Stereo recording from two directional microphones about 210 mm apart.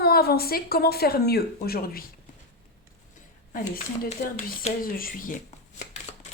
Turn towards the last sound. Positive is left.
turn(degrees=40)  # may be behind; listen again after turning